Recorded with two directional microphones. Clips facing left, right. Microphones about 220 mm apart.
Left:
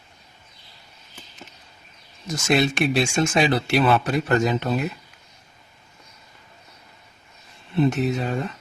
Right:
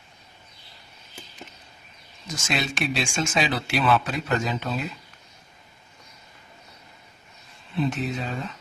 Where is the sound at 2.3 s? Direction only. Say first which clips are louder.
Left 8 dB; 65° left (ahead or behind).